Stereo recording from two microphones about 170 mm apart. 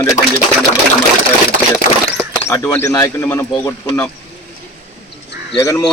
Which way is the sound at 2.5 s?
20° left (ahead or behind).